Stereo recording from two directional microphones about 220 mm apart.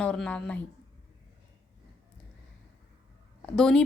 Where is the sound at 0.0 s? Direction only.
5° left (ahead or behind).